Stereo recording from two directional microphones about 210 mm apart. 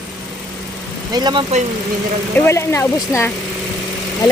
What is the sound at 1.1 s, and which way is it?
Speech, 20° right (ahead or behind).